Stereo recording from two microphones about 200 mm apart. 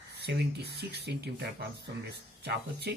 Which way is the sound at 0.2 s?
55° right (ahead or behind).